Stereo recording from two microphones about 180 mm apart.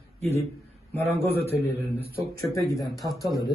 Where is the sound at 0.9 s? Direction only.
10° left (ahead or behind).